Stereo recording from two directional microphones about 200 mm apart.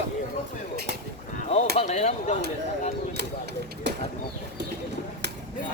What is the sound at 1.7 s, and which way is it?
Speech, 35° left (ahead or behind).